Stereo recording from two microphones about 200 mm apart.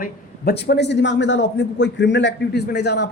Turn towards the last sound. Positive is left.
turn(degrees=55)  # may be behind; listen again after turning